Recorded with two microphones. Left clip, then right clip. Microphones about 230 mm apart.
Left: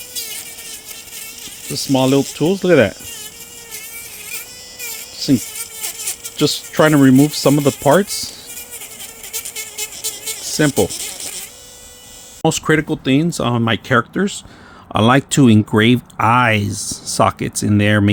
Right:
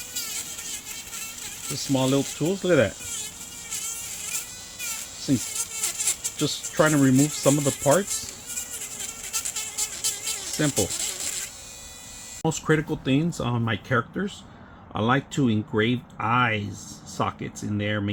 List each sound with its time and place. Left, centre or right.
1.7 s speech: left
6.4 s speech: left
10.6 s speech: left
12.4 s speech: left